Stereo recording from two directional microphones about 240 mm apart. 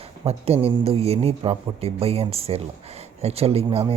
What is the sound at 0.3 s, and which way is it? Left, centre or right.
Speech, right.